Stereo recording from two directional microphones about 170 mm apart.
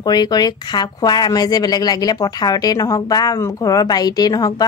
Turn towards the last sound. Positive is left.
turn(degrees=20)  # may be behind; listen again after turning